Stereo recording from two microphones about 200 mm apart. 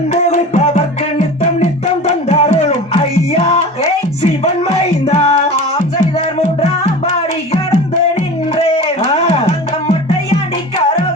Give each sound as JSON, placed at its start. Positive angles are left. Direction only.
{"t": 2.3, "sound": "music", "side_deg": 30}
{"t": 8.5, "sound": "music", "side_deg": 30}
{"t": 10.8, "sound": "music", "side_deg": 25}